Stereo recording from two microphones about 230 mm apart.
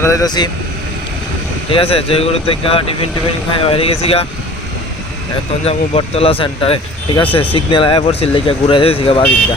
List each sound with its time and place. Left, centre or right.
0.0 s speech: centre
1.7 s speech: left
5.6 s speech: left